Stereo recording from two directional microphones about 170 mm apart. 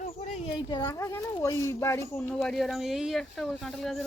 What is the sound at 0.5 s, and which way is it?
Speech, 25° left (ahead or behind).